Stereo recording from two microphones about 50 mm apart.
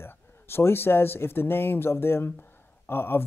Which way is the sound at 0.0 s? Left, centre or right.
Left.